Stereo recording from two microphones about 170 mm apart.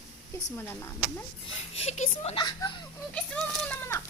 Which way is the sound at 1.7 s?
40° left (ahead or behind).